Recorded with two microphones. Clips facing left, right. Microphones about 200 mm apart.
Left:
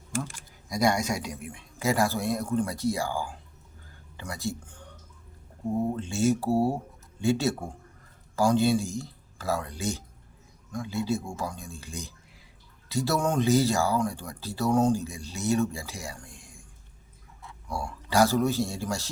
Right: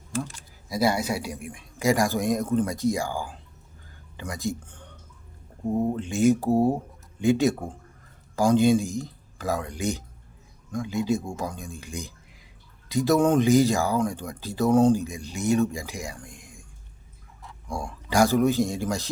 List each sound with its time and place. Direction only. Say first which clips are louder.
0.7 s speech: right 1 dB; 5° right (ahead or behind)
6.0 s speech: right 4 dB; 15° right (ahead or behind)
18.1 s speech: right 3 dB; 15° right (ahead or behind)